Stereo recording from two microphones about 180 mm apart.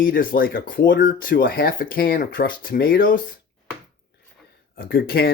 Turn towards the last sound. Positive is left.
turn(degrees=55)  # may be behind; listen again after turning